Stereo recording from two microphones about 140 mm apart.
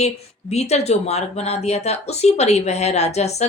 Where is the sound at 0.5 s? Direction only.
50° left (ahead or behind).